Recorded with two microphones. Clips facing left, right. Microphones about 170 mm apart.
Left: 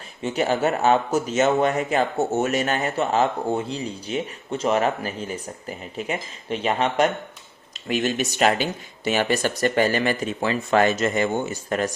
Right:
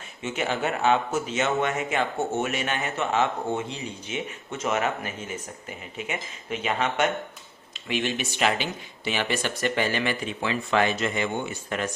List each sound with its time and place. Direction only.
0.2 s speech: 35° left (ahead or behind)